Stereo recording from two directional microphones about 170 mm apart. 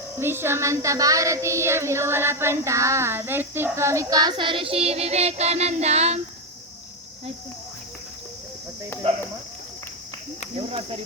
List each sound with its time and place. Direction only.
0.2 s speech: 15° right (ahead or behind); by 6.1 s 40° right (ahead or behind)
10.6 s speech: 35° right (ahead or behind)